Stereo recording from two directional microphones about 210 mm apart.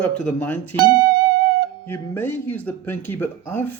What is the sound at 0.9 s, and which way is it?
Music, 20° right (ahead or behind).